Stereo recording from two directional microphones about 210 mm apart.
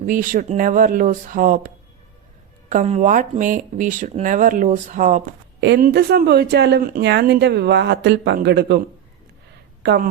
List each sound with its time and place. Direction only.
0.0 s speech: 40° right (ahead or behind)
5.5 s a woman's voice: 55° right (ahead or behind)
9.8 s a woman's voice: 50° right (ahead or behind)